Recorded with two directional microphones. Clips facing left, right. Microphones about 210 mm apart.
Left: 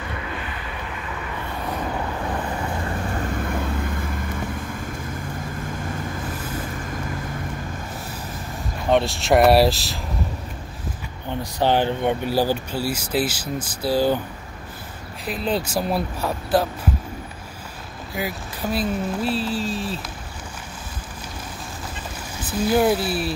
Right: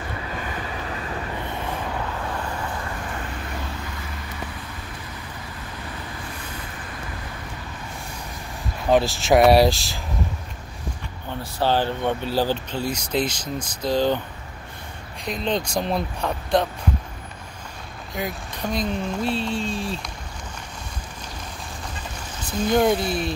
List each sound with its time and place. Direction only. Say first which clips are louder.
3.2 s vehicle: left 7 dB; 50° left (ahead or behind)
8.8 s speech: right 1 dB; centre (ahead or behind)
11.6 s speech: left 2 dB; 15° left (ahead or behind)
15.2 s speech: left 1 dB; 5° left (ahead or behind)
18.1 s speech: left 1 dB; 5° left (ahead or behind)
22.6 s speech: left 1 dB; 5° left (ahead or behind)